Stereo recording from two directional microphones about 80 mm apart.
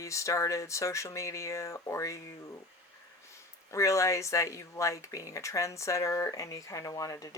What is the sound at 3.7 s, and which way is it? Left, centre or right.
Speech, left.